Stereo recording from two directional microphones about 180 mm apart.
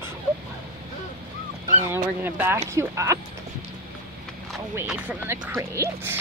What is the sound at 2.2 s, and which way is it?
Speech, 10° right (ahead or behind).